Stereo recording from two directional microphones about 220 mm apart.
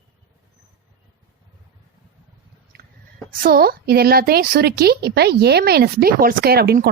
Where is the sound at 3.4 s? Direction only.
45° right (ahead or behind).